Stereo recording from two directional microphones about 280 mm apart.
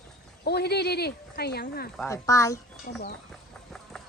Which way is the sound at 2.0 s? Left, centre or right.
Centre.